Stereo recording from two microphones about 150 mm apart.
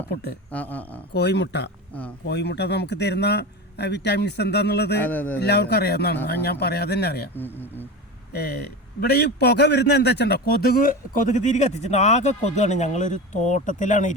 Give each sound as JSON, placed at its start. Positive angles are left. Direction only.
{"t": 0.1, "sound": "a man's voice", "side_deg": 90}
{"t": 0.5, "sound": "speech", "side_deg": 10}
{"t": 1.1, "sound": "a man's voice", "side_deg": 90}
{"t": 1.9, "sound": "speech", "side_deg": 10}
{"t": 2.4, "sound": "a man's voice", "side_deg": 90}
{"t": 5.0, "sound": "speech", "side_deg": 10}
{"t": 5.4, "sound": "a man's voice", "side_deg": 90}
{"t": 7.3, "sound": "speech", "side_deg": 15}
{"t": 8.3, "sound": "a man's voice", "side_deg": 90}